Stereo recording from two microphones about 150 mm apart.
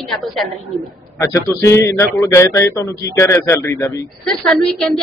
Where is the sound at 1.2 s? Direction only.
20° left (ahead or behind).